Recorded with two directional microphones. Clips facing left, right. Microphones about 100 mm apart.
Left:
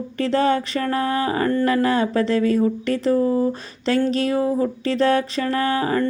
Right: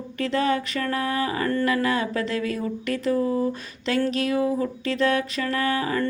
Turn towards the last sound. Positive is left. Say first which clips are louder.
# left 4 dB
turn(degrees=35)  # may be behind; listen again after turning